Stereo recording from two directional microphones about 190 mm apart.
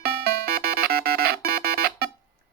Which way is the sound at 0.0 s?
50° right (ahead or behind).